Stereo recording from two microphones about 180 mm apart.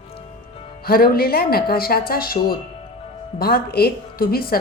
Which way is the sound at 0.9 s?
55° left (ahead or behind).